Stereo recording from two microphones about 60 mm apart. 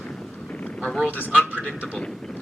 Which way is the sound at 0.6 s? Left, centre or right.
Centre.